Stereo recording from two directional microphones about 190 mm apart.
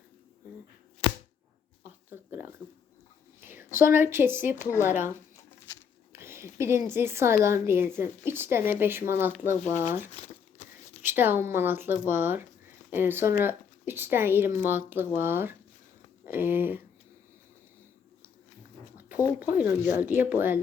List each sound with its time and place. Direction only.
1.0 s a sound: 30° left (ahead or behind)
1.8 s a sound: 10° right (ahead or behind)
3.4 s a woman's voice: 10° right (ahead or behind)
4.7 s speech: 15° left (ahead or behind)
6.1 s speech: 15° right (ahead or behind)
10.2 s crumpling: 35° left (ahead or behind)
11.0 s speech: 10° right (ahead or behind)
18.9 s a sound: 10° right (ahead or behind)
19.5 s speech: 10° right (ahead or behind)